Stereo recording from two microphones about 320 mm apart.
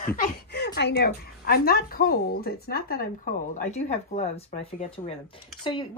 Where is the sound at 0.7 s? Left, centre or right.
Left.